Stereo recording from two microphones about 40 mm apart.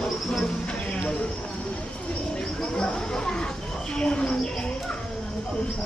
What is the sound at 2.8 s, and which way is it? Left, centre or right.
Speech, centre.